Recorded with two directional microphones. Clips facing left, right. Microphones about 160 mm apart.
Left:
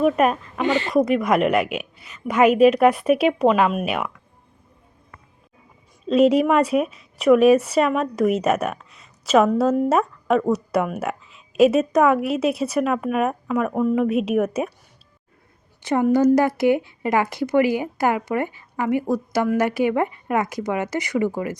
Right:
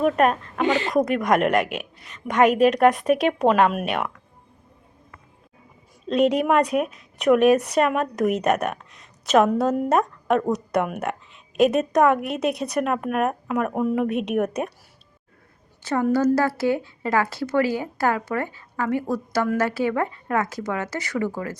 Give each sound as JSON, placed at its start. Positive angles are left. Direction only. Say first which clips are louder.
{"t": 0.0, "sound": "a woman's voice", "louder": "left 1 dB", "side_deg": 5}
{"t": 6.1, "sound": "a woman's voice", "louder": "left 3 dB", "side_deg": 5}
{"t": 15.8, "sound": "speech", "louder": "left 3 dB", "side_deg": 15}